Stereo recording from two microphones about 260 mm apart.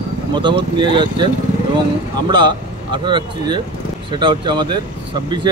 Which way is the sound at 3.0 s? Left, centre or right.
Centre.